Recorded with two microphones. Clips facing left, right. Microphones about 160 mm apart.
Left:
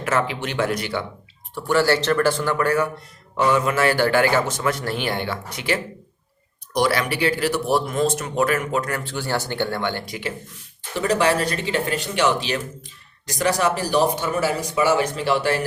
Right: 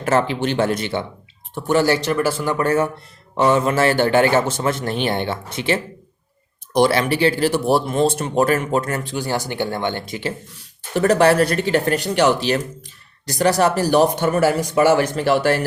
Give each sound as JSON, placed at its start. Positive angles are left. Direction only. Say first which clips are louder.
{"t": 0.0, "sound": "a man's voice", "louder": "right 5 dB", "side_deg": -30}
{"t": 2.6, "sound": "a man's voice", "louder": "right 2 dB", "side_deg": -25}
{"t": 9.0, "sound": "speech", "louder": "right 2 dB", "side_deg": -15}
{"t": 10.9, "sound": "speech", "louder": "right 5 dB", "side_deg": -50}